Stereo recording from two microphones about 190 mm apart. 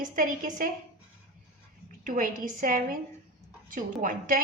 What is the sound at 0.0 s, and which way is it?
Speech, 45° right (ahead or behind).